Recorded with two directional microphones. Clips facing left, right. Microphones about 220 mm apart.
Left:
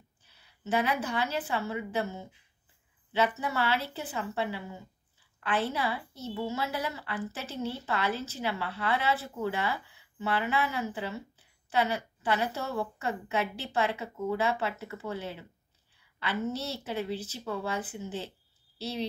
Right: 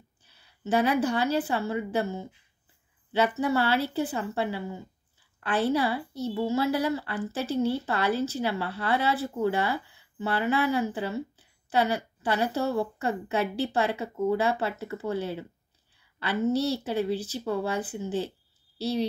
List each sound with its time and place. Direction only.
0.7 s a woman's voice: 35° right (ahead or behind)
3.1 s a woman's voice: 35° right (ahead or behind)